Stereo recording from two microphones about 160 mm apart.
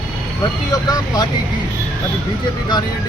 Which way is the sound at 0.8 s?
25° left (ahead or behind).